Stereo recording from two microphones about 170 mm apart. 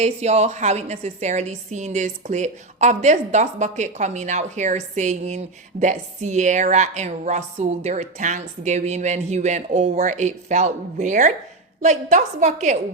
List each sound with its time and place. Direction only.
0.0 s a woman's voice: 40° right (ahead or behind)